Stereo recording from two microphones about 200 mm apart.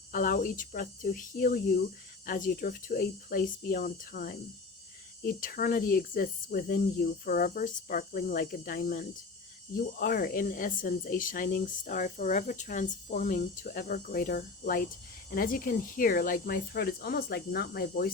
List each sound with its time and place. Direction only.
0.1 s speech: 45° left (ahead or behind)